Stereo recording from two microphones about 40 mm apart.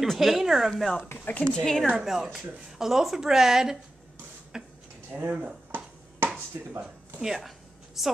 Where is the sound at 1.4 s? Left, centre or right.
Centre.